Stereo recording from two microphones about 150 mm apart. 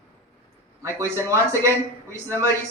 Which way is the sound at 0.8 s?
20° right (ahead or behind).